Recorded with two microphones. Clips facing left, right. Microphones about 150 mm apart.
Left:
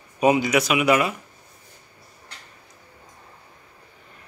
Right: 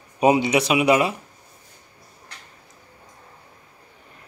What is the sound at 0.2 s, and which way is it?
Speech, 30° right (ahead or behind).